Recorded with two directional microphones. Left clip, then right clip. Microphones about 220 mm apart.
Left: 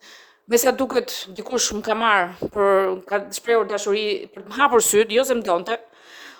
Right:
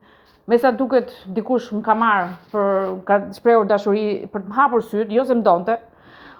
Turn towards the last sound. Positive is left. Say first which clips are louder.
# left 1 dB
turn(degrees=30)  # may be behind; listen again after turning